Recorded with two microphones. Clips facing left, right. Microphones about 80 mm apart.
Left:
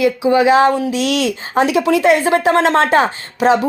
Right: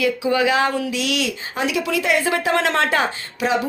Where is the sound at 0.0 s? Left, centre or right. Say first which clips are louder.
Left 6 dB; left.